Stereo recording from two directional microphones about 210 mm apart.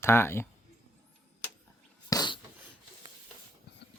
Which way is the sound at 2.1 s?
20° left (ahead or behind).